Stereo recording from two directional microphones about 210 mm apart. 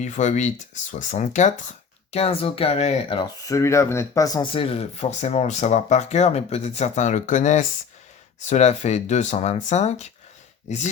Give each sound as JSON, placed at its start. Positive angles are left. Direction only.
{"t": 0.0, "sound": "speech", "side_deg": 35}